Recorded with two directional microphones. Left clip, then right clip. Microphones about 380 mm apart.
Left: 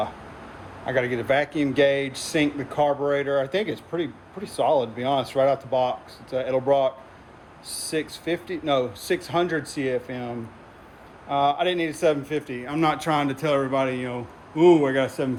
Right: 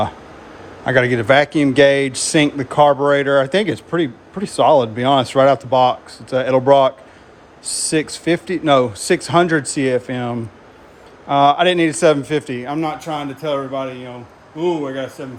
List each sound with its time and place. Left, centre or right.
0.9 s speech: right
12.8 s speech: centre